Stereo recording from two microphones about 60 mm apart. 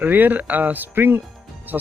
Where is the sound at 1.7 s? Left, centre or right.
Right.